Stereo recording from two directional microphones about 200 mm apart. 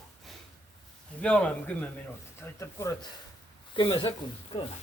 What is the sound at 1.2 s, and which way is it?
Speech, 5° left (ahead or behind).